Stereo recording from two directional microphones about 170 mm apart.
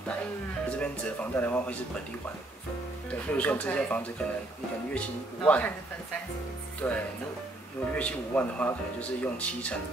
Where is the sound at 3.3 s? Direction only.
10° left (ahead or behind).